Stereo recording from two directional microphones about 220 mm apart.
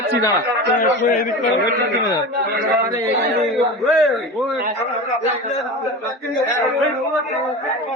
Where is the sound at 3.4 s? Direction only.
Centre (ahead or behind).